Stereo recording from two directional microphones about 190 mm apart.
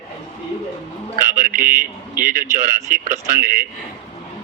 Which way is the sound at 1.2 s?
45° right (ahead or behind).